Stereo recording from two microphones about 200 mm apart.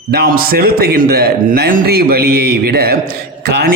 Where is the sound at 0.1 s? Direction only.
50° right (ahead or behind).